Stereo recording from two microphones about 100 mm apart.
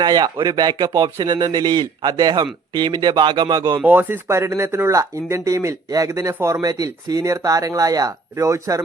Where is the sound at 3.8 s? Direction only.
20° right (ahead or behind).